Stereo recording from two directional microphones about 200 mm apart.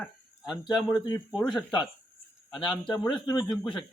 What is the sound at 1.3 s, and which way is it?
Speech, centre (ahead or behind).